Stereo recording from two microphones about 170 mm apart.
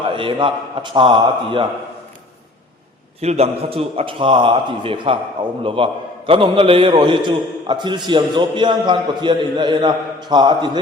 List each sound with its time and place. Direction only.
0.0 s a man's voice: 30° right (ahead or behind)
3.2 s a man's voice: 40° right (ahead or behind)